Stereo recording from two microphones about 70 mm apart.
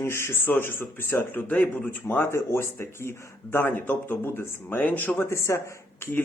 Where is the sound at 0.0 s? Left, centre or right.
Left.